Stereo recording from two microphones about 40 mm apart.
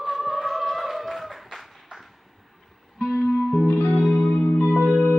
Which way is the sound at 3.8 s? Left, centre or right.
Left.